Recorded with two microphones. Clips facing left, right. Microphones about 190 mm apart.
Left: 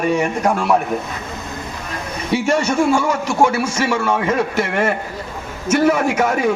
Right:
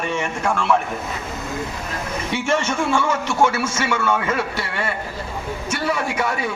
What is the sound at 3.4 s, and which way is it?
Speech, 15° left (ahead or behind).